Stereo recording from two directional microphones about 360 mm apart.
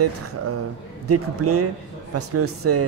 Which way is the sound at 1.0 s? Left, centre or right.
Right.